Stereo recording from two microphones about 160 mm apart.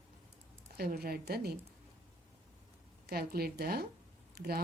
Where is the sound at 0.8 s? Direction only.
75° right (ahead or behind).